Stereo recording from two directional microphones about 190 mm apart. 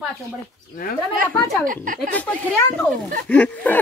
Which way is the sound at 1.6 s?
45° right (ahead or behind).